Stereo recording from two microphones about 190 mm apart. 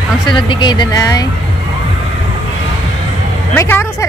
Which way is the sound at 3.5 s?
10° left (ahead or behind).